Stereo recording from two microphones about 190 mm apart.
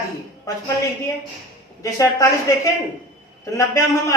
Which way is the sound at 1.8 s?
15° left (ahead or behind).